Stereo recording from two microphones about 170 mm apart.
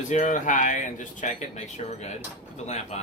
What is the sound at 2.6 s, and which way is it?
Speech, 40° left (ahead or behind).